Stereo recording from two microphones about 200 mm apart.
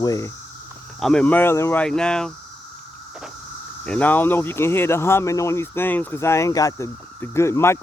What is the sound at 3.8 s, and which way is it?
Speech, 5° left (ahead or behind).